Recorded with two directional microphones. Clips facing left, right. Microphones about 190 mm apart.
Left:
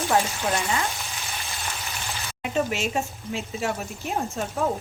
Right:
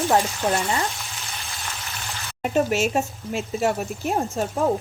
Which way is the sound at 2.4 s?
45° right (ahead or behind).